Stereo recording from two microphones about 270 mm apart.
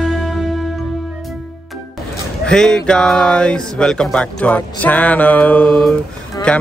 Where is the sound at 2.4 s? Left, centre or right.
Centre.